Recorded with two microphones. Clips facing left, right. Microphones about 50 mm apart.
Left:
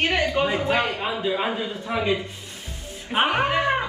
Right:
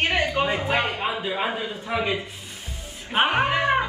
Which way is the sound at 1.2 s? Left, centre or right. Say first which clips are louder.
Left 2 dB; centre.